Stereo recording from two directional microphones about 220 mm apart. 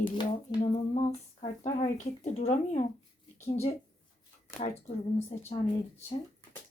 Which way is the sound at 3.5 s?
30° left (ahead or behind).